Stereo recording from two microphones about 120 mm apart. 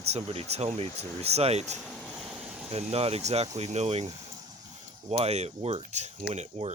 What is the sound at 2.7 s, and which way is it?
Speech, 60° right (ahead or behind).